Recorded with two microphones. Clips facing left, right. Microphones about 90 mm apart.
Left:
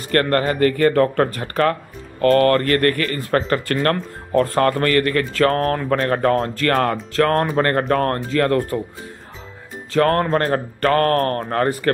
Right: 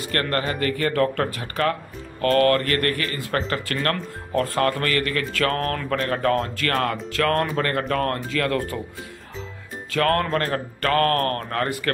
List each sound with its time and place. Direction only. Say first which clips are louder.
0.1 s speech: left 7 dB; 40° left (ahead or behind)
9.8 s speech: left 4 dB; 30° left (ahead or behind)